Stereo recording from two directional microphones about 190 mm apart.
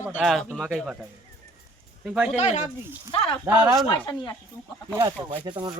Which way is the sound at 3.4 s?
10° right (ahead or behind).